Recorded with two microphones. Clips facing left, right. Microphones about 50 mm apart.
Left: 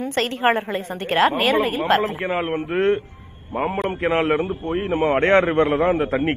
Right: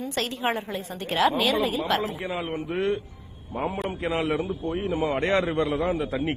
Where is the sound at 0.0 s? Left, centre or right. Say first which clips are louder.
Left 7 dB; left.